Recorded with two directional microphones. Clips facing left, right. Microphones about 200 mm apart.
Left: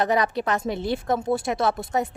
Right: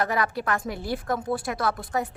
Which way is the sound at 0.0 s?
20° left (ahead or behind).